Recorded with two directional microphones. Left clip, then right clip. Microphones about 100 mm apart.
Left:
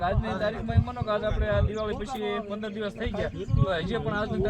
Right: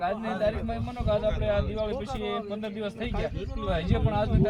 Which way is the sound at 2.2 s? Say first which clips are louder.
Left 1 dB; 5° left (ahead or behind).